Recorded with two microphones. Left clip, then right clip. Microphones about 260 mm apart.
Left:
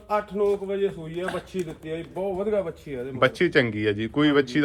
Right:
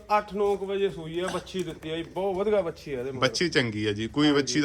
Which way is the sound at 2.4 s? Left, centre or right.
Right.